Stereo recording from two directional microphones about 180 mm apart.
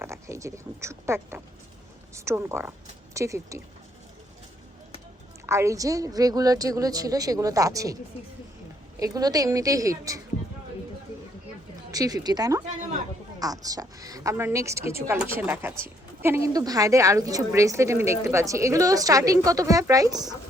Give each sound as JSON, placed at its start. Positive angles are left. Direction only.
{"t": 0.0, "sound": "speech", "side_deg": -15}
{"t": 5.5, "sound": "a woman's voice", "side_deg": -15}
{"t": 9.0, "sound": "a woman's voice", "side_deg": -20}
{"t": 11.9, "sound": "speech", "side_deg": -20}